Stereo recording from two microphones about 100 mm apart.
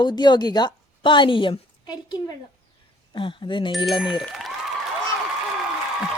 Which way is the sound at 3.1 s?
55° left (ahead or behind).